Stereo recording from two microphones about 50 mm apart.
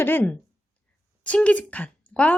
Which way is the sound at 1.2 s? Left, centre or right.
Left.